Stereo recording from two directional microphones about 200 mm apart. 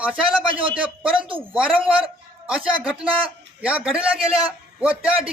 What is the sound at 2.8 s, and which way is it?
A man's voice, 5° right (ahead or behind).